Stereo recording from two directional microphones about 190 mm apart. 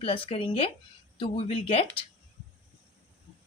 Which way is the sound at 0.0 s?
30° left (ahead or behind).